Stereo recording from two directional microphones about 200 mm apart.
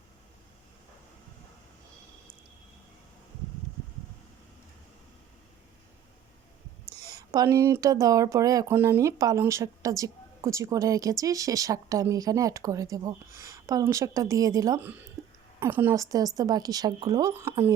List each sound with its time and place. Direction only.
6.9 s speech: 20° right (ahead or behind)
15.2 s a sound: 15° right (ahead or behind)
15.6 s speech: 10° right (ahead or behind)